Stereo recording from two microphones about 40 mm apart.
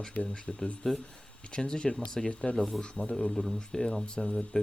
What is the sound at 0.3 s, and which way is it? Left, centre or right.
Speech, left.